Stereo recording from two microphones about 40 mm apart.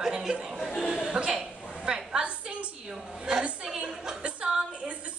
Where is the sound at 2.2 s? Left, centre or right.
Right.